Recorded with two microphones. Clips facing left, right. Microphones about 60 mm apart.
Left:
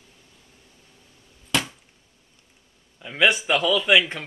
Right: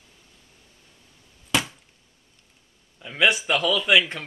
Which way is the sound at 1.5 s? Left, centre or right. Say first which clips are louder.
Even; centre.